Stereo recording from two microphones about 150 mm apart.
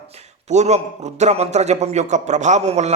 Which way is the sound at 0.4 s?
50° right (ahead or behind).